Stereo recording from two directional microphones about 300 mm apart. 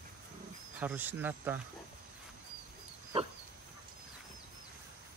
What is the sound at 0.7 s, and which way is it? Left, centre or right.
Speech, centre.